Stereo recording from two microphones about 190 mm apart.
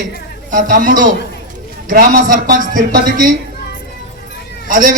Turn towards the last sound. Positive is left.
turn(degrees=-45)  # may be behind; listen again after turning